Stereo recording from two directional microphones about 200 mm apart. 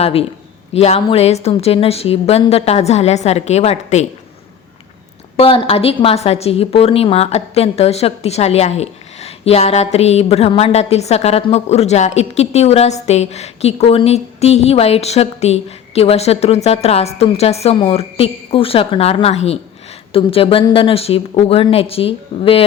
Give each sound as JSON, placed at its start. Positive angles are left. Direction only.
{"t": 0.0, "sound": "a woman's voice", "side_deg": 30}
{"t": 5.4, "sound": "a woman's voice", "side_deg": 25}